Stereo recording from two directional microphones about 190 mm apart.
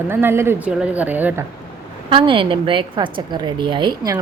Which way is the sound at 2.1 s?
25° right (ahead or behind).